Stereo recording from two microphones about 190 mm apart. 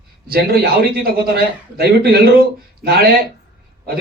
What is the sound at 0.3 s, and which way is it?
A man's voice, 55° right (ahead or behind).